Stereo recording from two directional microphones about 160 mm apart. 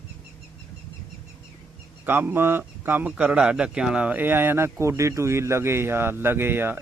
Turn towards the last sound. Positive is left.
turn(degrees=-15)  # may be behind; listen again after turning